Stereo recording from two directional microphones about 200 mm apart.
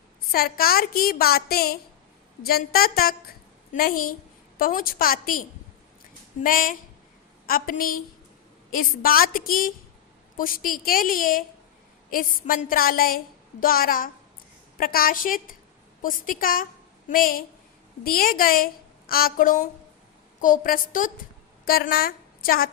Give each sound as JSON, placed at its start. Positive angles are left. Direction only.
{"t": 0.3, "sound": "a woman's voice", "side_deg": 50}